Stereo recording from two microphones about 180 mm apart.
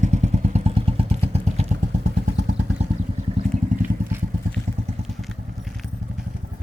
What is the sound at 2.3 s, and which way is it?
Vehicle, 70° right (ahead or behind).